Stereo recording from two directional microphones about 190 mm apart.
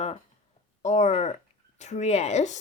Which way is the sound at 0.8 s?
35° left (ahead or behind).